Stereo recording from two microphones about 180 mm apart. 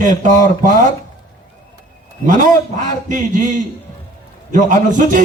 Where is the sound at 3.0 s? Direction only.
45° right (ahead or behind).